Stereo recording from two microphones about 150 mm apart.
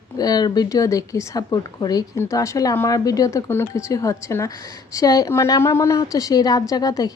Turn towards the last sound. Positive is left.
turn(degrees=25)  # may be behind; listen again after turning